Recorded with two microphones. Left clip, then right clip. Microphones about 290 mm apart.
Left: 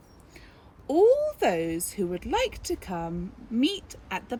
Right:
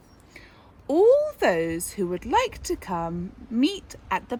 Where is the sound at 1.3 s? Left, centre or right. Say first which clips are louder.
Right 3 dB; centre.